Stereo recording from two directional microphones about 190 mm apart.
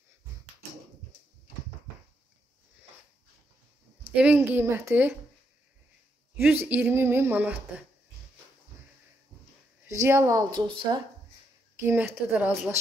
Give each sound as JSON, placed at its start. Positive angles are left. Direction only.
{"t": 4.1, "sound": "speech", "side_deg": -5}
{"t": 6.3, "sound": "speech", "side_deg": -10}
{"t": 9.8, "sound": "speech", "side_deg": -15}
{"t": 11.8, "sound": "speech", "side_deg": -10}